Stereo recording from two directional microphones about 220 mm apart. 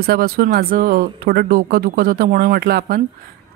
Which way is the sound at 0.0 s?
45° right (ahead or behind).